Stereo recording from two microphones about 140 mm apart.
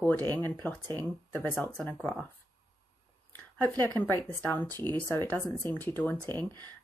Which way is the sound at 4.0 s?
15° left (ahead or behind).